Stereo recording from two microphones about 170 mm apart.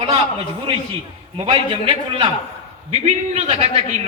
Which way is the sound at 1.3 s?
35° right (ahead or behind).